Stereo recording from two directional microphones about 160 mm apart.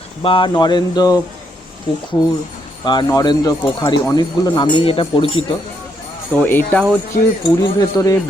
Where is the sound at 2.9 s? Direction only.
25° left (ahead or behind).